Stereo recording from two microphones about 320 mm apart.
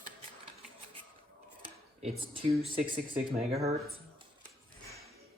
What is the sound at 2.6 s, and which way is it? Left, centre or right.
Speech, centre.